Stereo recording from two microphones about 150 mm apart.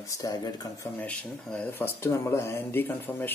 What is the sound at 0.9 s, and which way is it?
Speech, 10° left (ahead or behind).